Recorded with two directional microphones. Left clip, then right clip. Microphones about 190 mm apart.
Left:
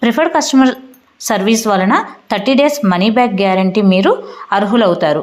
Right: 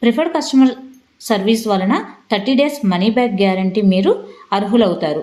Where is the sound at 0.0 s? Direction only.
15° left (ahead or behind).